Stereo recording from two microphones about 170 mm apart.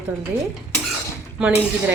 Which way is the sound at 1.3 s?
5° right (ahead or behind).